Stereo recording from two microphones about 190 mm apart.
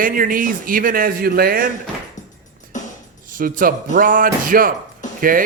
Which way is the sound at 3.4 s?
45° right (ahead or behind).